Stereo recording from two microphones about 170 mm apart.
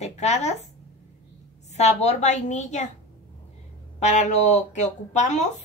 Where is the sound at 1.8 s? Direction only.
40° left (ahead or behind).